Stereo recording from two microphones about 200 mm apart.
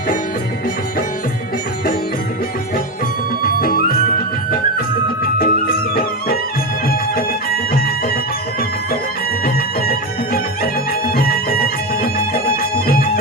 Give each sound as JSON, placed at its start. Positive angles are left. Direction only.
{"t": 3.4, "sound": "music", "side_deg": 45}
{"t": 5.2, "sound": "music", "side_deg": 50}
{"t": 9.4, "sound": "music", "side_deg": 45}